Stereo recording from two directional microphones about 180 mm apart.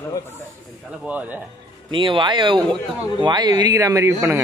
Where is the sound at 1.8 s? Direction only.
25° right (ahead or behind).